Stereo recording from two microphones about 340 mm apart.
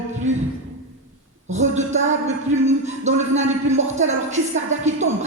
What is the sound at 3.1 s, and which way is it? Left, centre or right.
Speech, right.